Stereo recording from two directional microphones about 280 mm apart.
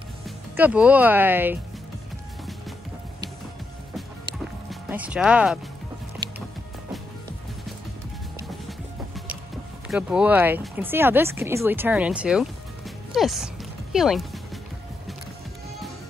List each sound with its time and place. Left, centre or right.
0.6 s speech: centre
4.6 s speech: centre
8.6 s music: centre
9.8 s speech: centre
13.9 s music: centre